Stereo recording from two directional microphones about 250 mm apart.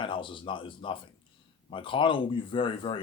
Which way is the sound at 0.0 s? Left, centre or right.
Centre.